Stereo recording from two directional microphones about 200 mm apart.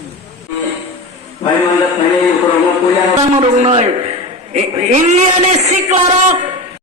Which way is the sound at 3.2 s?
25° right (ahead or behind).